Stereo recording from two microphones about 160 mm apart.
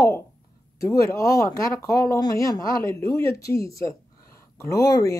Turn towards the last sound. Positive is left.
turn(degrees=20)  # may be behind; listen again after turning